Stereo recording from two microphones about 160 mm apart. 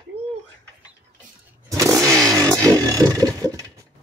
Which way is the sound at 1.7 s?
20° right (ahead or behind).